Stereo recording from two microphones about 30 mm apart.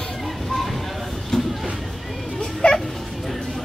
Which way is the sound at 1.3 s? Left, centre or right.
Centre.